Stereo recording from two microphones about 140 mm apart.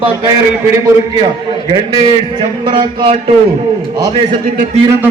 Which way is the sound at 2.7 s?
35° right (ahead or behind).